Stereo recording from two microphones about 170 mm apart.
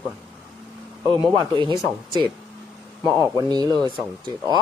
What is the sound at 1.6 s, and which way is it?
Speech, 25° right (ahead or behind).